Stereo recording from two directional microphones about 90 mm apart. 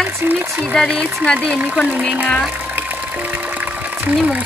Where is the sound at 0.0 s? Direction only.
20° right (ahead or behind).